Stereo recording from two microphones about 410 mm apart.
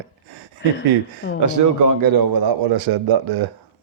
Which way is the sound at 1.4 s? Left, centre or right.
Right.